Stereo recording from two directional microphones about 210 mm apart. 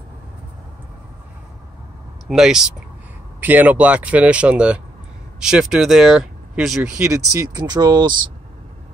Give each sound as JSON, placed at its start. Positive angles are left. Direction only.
{"t": 2.2, "sound": "speech", "side_deg": 0}
{"t": 7.3, "sound": "speech", "side_deg": -20}